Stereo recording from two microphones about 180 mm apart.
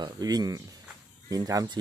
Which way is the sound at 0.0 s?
20° right (ahead or behind).